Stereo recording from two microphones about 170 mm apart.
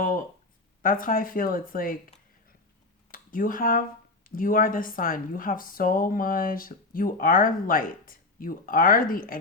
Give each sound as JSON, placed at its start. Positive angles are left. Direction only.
{"t": 0.8, "sound": "speech", "side_deg": 55}